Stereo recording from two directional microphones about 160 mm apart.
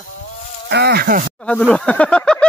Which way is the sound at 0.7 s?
90° right.